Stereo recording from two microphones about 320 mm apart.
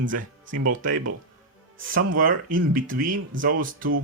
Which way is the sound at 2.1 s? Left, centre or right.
Right.